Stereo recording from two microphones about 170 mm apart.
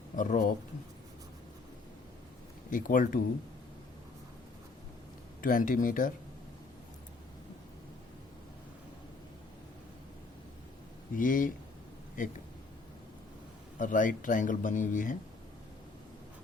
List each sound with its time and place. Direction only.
0.2 s speech: 55° left (ahead or behind)
2.6 s speech: 50° left (ahead or behind)
5.4 s speech: 50° left (ahead or behind)
11.2 s speech: 50° left (ahead or behind)
13.7 s speech: 50° left (ahead or behind)